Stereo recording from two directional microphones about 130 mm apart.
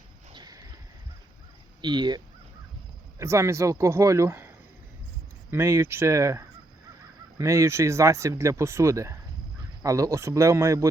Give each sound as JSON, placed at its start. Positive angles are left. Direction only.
{"t": 0.3, "sound": "a sound", "side_deg": -30}
{"t": 1.8, "sound": "speech", "side_deg": -35}
{"t": 3.2, "sound": "speech", "side_deg": -20}